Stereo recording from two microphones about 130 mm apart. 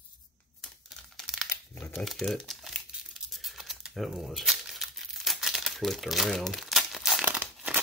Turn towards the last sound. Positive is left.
turn(degrees=-10)  # may be behind; listen again after turning